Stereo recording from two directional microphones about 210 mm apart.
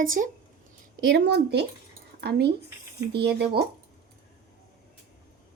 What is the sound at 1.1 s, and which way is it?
Speech, 55° right (ahead or behind).